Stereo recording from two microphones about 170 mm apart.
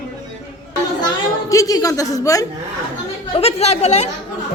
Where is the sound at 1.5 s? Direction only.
20° left (ahead or behind).